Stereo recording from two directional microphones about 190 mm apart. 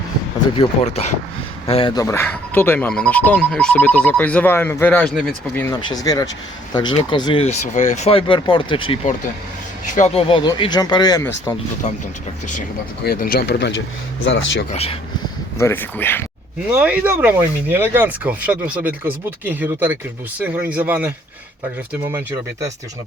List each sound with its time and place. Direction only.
0.5 s speech: 30° left (ahead or behind)
2.0 s speech: 15° left (ahead or behind)
5.7 s speech: 20° left (ahead or behind)
13.1 s speech: 50° left (ahead or behind); by 14.7 s 75° left (ahead or behind)
14.7 s speech: 30° left (ahead or behind)
15.5 s speech: 10° left (ahead or behind)
16.7 s speech: 10° right (ahead or behind)